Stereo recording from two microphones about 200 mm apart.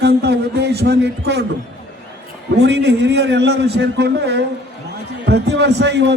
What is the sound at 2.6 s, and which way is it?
A man's voice, 55° right (ahead or behind).